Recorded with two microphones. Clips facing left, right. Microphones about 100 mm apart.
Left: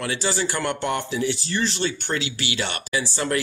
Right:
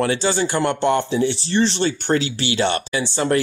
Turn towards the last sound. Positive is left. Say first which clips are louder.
# right 5 dB
turn(degrees=-25)  # may be behind; listen again after turning